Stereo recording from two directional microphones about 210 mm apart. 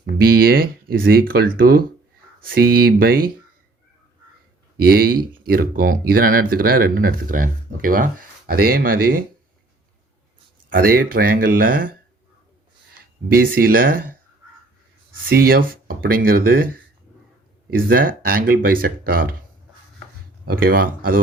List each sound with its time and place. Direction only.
0.2 s speech: 45° right (ahead or behind)
4.8 s speech: 45° right (ahead or behind)
10.8 s speech: 45° right (ahead or behind)
13.2 s speech: 45° right (ahead or behind)
15.3 s speech: 45° right (ahead or behind)
17.7 s speech: 45° right (ahead or behind)
20.4 s speech: 45° right (ahead or behind)